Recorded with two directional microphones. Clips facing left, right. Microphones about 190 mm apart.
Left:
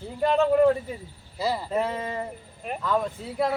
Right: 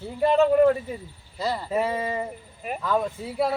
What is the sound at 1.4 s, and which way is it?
Speech, 10° left (ahead or behind).